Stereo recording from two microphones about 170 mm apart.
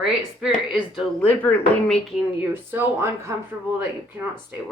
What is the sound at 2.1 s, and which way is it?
Speech, 10° right (ahead or behind).